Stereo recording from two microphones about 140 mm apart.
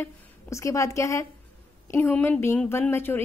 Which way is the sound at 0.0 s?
20° left (ahead or behind).